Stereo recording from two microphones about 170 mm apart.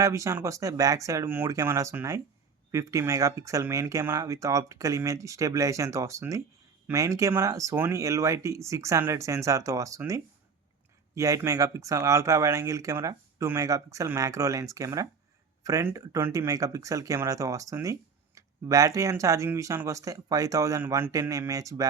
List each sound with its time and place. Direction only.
0.0 s speech: 20° right (ahead or behind)